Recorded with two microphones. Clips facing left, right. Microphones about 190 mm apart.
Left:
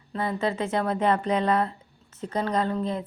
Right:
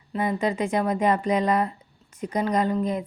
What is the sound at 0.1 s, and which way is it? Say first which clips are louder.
Speech: right 2 dB; 15° right (ahead or behind).